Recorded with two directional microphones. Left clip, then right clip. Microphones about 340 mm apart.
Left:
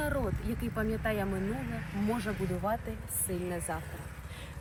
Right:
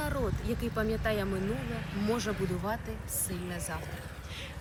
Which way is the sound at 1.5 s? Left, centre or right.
Right.